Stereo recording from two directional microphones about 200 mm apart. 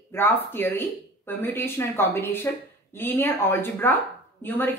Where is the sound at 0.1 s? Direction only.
10° left (ahead or behind).